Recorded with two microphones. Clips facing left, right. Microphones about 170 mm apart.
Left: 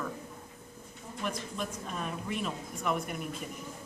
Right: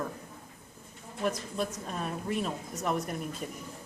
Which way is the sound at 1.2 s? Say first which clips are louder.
Right 5 dB; 35° right (ahead or behind).